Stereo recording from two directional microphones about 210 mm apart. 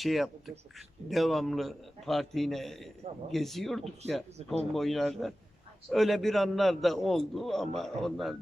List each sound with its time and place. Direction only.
0.0 s a man's voice: centre (ahead or behind)
4.4 s speech: 30° right (ahead or behind)
4.7 s a man's voice: centre (ahead or behind)